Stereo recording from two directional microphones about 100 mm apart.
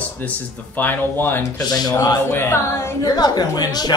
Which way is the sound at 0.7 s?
20° left (ahead or behind).